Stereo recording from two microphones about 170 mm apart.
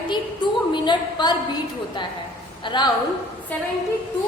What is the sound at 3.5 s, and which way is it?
Speech, 10° left (ahead or behind).